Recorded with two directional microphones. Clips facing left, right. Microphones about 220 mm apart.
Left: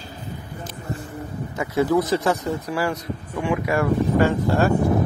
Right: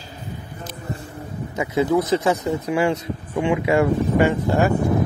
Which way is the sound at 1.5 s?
20° right (ahead or behind).